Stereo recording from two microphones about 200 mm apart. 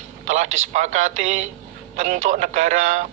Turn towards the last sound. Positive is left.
turn(degrees=-35)  # may be behind; listen again after turning